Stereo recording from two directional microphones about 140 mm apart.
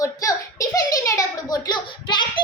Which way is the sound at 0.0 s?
25° left (ahead or behind).